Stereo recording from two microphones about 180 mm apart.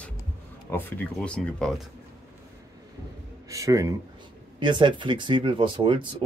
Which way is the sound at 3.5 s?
20° right (ahead or behind).